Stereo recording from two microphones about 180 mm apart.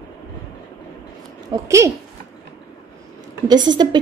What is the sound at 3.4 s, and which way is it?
Speech, 25° right (ahead or behind).